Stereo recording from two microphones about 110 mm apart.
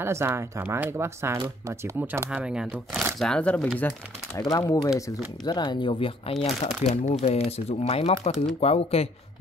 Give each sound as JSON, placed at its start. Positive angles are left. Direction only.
{"t": 0.0, "sound": "speech", "side_deg": -20}
{"t": 3.2, "sound": "speech", "side_deg": 5}
{"t": 4.4, "sound": "speech", "side_deg": 30}
{"t": 5.4, "sound": "speech", "side_deg": 40}
{"t": 6.4, "sound": "speech", "side_deg": 70}
{"t": 8.2, "sound": "speech", "side_deg": 90}
{"t": 8.5, "sound": "speech", "side_deg": 70}